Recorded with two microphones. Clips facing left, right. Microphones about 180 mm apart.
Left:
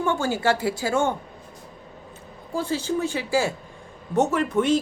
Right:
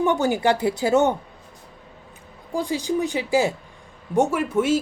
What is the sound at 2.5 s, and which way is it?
Speech, 15° right (ahead or behind).